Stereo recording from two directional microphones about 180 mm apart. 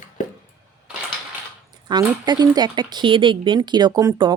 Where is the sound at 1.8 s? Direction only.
25° right (ahead or behind).